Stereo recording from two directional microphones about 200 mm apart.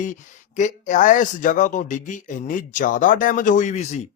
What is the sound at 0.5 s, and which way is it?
Speech, 40° left (ahead or behind).